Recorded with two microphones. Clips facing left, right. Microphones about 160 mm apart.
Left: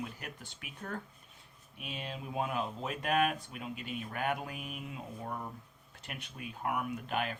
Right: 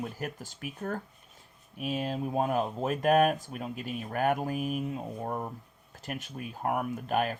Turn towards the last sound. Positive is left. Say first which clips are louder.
# right 6 dB
turn(degrees=-40)  # may be behind; listen again after turning